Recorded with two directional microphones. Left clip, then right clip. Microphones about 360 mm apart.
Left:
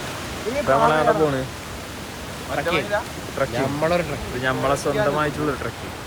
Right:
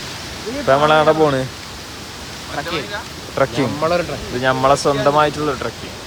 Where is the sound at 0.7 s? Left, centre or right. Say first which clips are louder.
Right 5 dB; right.